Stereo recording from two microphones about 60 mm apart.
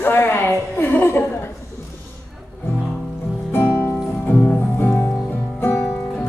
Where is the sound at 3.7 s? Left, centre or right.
Left.